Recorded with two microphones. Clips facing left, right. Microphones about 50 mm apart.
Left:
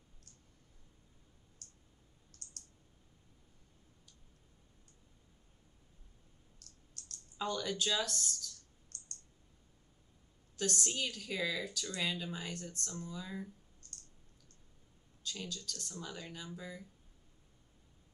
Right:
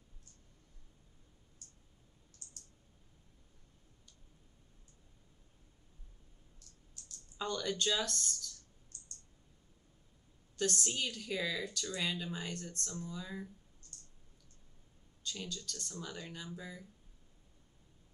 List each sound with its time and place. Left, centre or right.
1.6 s clicking: left
6.6 s a sound: left
7.3 s speech: centre
8.9 s clicking: left
10.5 s speech: centre
15.2 s speech: centre